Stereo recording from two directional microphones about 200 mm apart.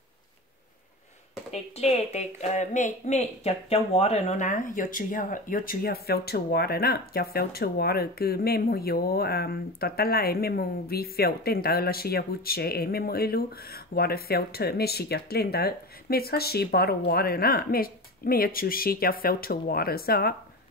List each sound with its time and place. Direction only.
1.5 s a woman's voice: 35° left (ahead or behind); by 20.3 s 50° left (ahead or behind)